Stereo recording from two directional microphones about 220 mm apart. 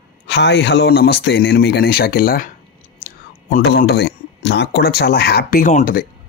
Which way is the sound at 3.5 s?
45° left (ahead or behind).